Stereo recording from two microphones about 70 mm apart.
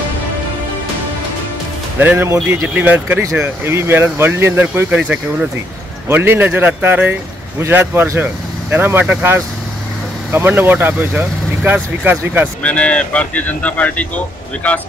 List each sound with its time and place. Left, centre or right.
2.0 s speech: right
2.2 s speech: right
2.7 s speech: right
4.9 s speech: centre
6.0 s speech: right
10.3 s speech: right
12.6 s speech: centre